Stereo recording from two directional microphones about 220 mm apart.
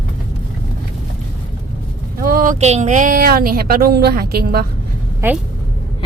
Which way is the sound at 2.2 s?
40° right (ahead or behind).